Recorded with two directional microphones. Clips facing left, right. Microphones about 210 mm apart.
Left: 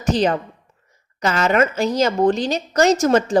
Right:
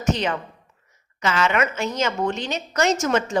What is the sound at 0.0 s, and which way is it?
A woman's voice, 35° left (ahead or behind).